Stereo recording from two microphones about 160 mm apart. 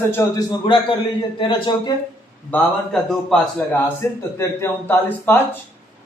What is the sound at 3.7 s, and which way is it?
A man's voice, 15° left (ahead or behind).